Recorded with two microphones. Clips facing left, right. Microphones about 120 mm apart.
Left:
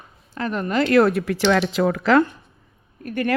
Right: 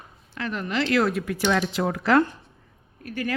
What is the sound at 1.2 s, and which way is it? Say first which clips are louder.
Speech: left 5 dB; 80° left.